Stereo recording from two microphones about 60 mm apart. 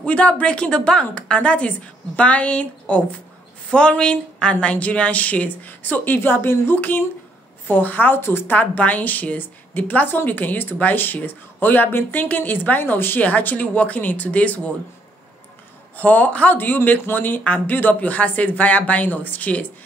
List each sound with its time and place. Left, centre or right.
0.0 s a woman's voice: left
8.5 s a woman's voice: left
16.0 s a woman's voice: left